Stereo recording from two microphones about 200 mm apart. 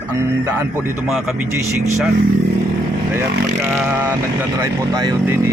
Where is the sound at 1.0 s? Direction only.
Centre (ahead or behind).